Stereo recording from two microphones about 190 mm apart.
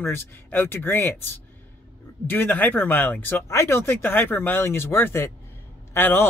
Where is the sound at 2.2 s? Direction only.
10° left (ahead or behind).